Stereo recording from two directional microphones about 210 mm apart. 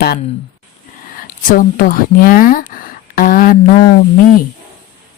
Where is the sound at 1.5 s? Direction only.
40° left (ahead or behind).